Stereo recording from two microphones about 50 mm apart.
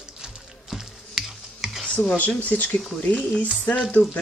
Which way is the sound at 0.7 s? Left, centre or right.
Centre.